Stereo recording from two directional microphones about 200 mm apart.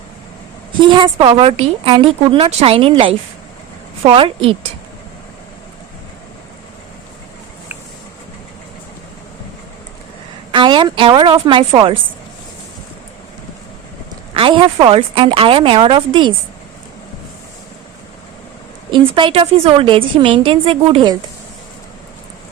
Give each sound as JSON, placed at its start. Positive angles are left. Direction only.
{"t": 0.8, "sound": "speech", "side_deg": -25}
{"t": 10.5, "sound": "speech", "side_deg": -25}
{"t": 14.3, "sound": "speech", "side_deg": -25}
{"t": 18.9, "sound": "speech", "side_deg": -25}